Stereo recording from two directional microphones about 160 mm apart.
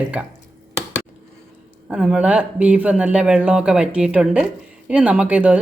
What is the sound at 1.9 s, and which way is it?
Speech, 5° right (ahead or behind).